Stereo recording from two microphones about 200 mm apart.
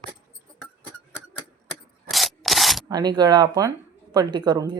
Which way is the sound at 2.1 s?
Centre (ahead or behind).